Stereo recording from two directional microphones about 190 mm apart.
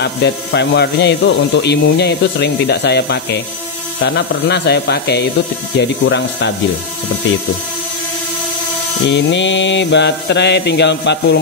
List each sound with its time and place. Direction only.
0.0 s speech: 65° left (ahead or behind)
9.0 s speech: 70° left (ahead or behind)